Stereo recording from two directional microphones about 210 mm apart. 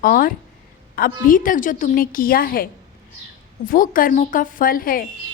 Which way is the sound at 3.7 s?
40° left (ahead or behind).